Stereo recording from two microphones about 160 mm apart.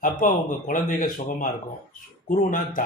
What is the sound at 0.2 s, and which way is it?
A man's voice, 55° left (ahead or behind).